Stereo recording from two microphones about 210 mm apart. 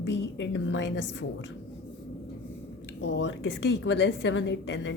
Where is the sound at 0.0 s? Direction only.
60° left (ahead or behind).